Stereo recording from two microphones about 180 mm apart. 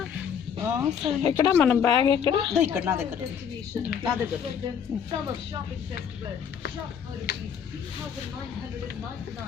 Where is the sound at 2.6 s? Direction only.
10° right (ahead or behind).